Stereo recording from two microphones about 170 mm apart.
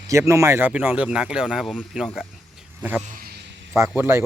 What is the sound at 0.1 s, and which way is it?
Speech, 15° right (ahead or behind).